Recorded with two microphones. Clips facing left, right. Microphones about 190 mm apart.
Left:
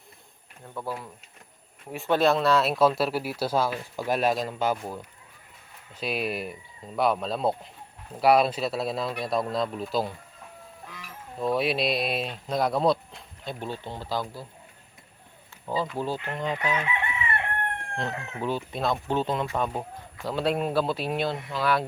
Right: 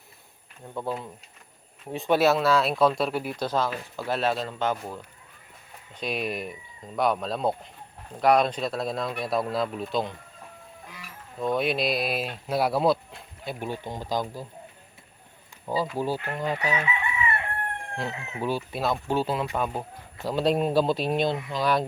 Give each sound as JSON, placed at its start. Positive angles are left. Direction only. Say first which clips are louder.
{"t": 0.7, "sound": "speech", "louder": "right 3 dB", "side_deg": -20}
{"t": 6.0, "sound": "speech", "louder": "even", "side_deg": 0}
{"t": 11.3, "sound": "speech", "louder": "even", "side_deg": 0}
{"t": 15.6, "sound": "speech", "louder": "right 2 dB", "side_deg": -10}
{"t": 16.8, "sound": "chicken", "louder": "right 2 dB", "side_deg": 55}
{"t": 18.3, "sound": "speech", "louder": "right 1 dB", "side_deg": -10}
{"t": 20.4, "sound": "speech", "louder": "right 3 dB", "side_deg": 10}
{"t": 21.2, "sound": "speech", "louder": "right 1 dB", "side_deg": -15}